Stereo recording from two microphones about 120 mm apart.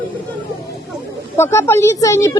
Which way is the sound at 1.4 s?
20° left (ahead or behind).